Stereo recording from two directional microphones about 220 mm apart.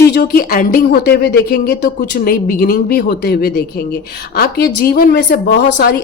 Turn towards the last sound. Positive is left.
turn(degrees=50)  # may be behind; listen again after turning